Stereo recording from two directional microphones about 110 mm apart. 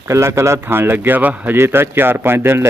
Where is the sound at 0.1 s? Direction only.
25° right (ahead or behind).